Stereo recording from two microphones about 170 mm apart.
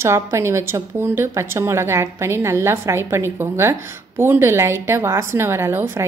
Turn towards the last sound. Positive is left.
turn(degrees=-15)  # may be behind; listen again after turning